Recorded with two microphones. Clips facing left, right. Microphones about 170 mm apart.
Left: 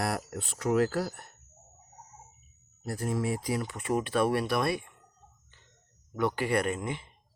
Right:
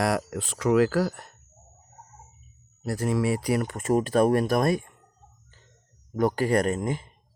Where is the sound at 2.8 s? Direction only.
85° right; by 5.0 s 45° right (ahead or behind).